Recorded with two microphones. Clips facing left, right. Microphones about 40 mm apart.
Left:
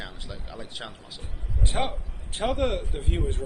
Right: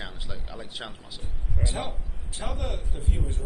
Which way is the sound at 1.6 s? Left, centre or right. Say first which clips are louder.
Left 5 dB; left.